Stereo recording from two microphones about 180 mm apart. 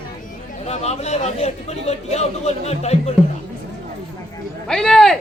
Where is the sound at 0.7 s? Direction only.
35° left (ahead or behind).